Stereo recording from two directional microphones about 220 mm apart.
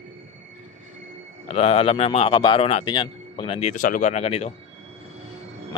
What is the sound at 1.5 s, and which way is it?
A man's voice, 25° left (ahead or behind).